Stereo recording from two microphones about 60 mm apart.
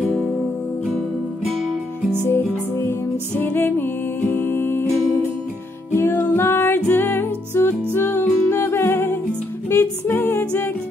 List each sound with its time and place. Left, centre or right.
2.2 s music: left